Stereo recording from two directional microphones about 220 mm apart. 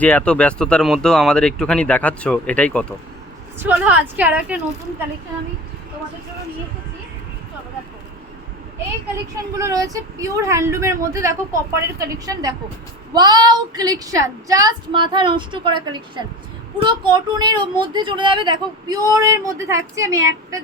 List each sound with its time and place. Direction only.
0.0 s speech: 5° left (ahead or behind)
3.6 s speech: 10° right (ahead or behind)
9.6 s speech: 15° right (ahead or behind)